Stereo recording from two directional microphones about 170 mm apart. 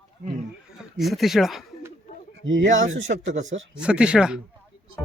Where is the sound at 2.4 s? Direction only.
90° right.